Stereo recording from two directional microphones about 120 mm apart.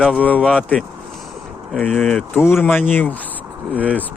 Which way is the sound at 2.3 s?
20° left (ahead or behind).